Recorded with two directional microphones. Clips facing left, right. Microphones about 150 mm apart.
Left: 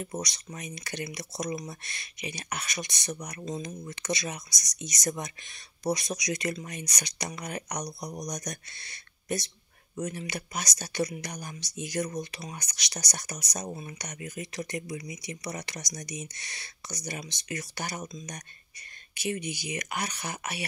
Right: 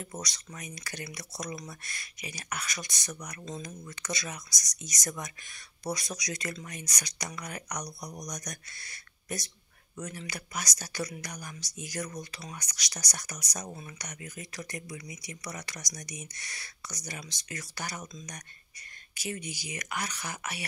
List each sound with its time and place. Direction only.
0.0 s speech: 20° left (ahead or behind)
3.4 s speech: 15° left (ahead or behind)
19.4 s speech: 25° left (ahead or behind)